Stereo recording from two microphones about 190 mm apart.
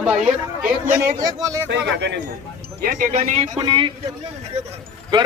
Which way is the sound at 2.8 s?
45° right (ahead or behind).